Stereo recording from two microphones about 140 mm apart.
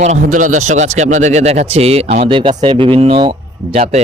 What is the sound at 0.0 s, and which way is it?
A man's voice, 60° right (ahead or behind).